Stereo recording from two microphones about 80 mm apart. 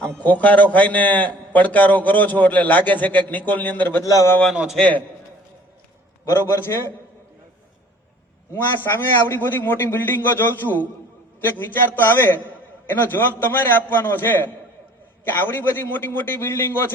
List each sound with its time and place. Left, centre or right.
0.2 s a man's voice: centre
4.0 s speech: left
4.5 s a man's voice: centre
6.2 s a man's voice: left
8.5 s a man's voice: left